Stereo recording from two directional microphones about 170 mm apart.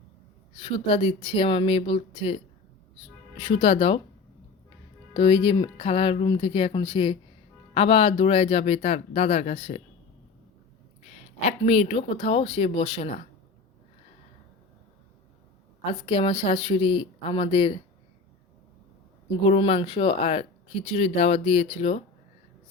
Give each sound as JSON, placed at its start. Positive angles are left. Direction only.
{"t": 0.5, "sound": "speech", "side_deg": 35}
{"t": 5.1, "sound": "speech", "side_deg": 30}
{"t": 11.1, "sound": "speech", "side_deg": 40}
{"t": 15.8, "sound": "speech", "side_deg": 30}
{"t": 19.4, "sound": "speech", "side_deg": 35}